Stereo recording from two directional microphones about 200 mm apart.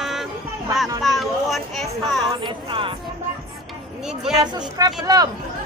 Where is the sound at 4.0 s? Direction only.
5° right (ahead or behind).